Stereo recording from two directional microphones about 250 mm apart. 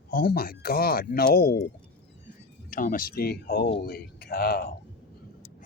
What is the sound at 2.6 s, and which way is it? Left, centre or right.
Speech, left.